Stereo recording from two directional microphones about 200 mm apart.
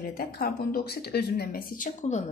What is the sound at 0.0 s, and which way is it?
Speech, 45° left (ahead or behind).